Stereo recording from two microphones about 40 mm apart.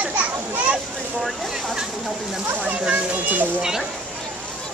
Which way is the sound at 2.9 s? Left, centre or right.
Right.